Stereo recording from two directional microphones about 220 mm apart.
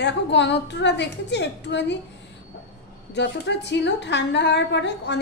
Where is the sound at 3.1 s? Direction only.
50° left (ahead or behind).